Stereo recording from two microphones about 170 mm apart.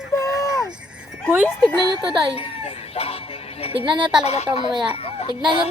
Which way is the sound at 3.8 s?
30° right (ahead or behind).